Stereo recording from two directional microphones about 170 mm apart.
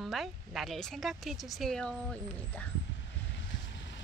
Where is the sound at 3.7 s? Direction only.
90° left.